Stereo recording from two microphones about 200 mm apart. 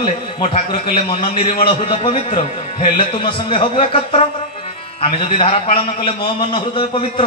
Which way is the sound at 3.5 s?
25° left (ahead or behind).